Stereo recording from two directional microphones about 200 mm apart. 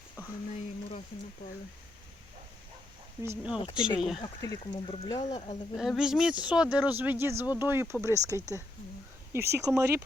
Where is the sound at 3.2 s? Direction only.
10° right (ahead or behind).